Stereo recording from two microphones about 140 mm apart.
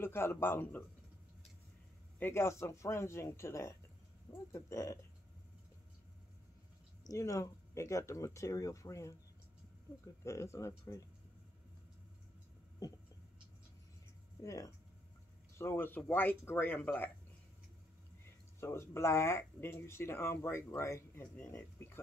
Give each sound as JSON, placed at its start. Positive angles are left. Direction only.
{"t": 0.0, "sound": "speech", "side_deg": 15}
{"t": 2.1, "sound": "speech", "side_deg": 15}
{"t": 7.1, "sound": "speech", "side_deg": 20}
{"t": 10.2, "sound": "speech", "side_deg": 20}
{"t": 14.4, "sound": "speech", "side_deg": 25}
{"t": 18.2, "sound": "speech", "side_deg": 15}